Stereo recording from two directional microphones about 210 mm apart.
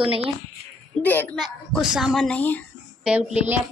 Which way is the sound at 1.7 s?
5° right (ahead or behind).